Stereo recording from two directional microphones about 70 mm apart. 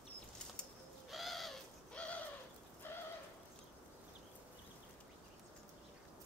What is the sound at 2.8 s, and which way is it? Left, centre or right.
Rain, left.